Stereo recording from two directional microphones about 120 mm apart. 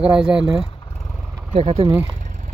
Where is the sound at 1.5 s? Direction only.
55° right (ahead or behind).